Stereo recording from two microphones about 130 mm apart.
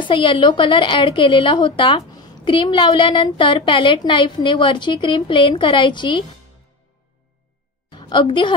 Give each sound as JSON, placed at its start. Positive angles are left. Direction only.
{"t": 0.1, "sound": "a woman's voice", "side_deg": 40}
{"t": 7.9, "sound": "a woman's voice", "side_deg": 35}